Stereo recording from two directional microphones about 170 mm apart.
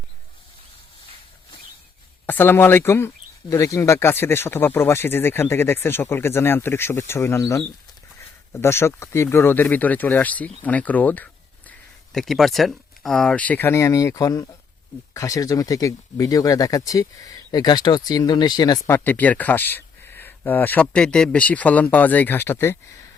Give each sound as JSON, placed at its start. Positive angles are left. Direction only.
{"t": 2.2, "sound": "speech", "side_deg": 10}
{"t": 18.9, "sound": "speech", "side_deg": 10}